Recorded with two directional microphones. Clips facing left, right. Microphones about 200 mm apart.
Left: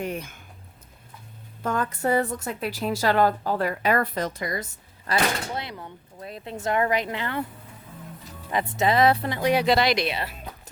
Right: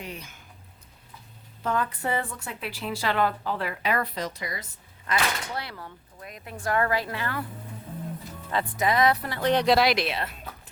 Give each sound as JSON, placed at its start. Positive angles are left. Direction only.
{"t": 0.0, "sound": "speech", "side_deg": 50}
{"t": 1.6, "sound": "speech", "side_deg": 45}
{"t": 5.1, "sound": "speech", "side_deg": 35}
{"t": 5.5, "sound": "speech", "side_deg": 20}
{"t": 8.4, "sound": "speech", "side_deg": 20}
{"t": 9.4, "sound": "speech", "side_deg": 10}